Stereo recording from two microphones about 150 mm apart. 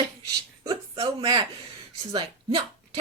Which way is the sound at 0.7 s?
35° right (ahead or behind).